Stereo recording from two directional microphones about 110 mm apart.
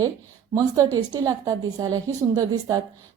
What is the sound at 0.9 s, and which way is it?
A woman's voice, 35° right (ahead or behind).